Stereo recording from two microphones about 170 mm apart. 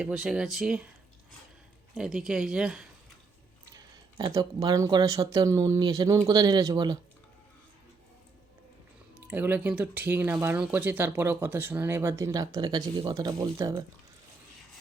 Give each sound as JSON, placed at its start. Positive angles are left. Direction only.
{"t": 0.0, "sound": "speech", "side_deg": -5}
{"t": 2.0, "sound": "speech", "side_deg": -5}
{"t": 3.7, "sound": "speech", "side_deg": -20}
{"t": 9.3, "sound": "speech", "side_deg": -10}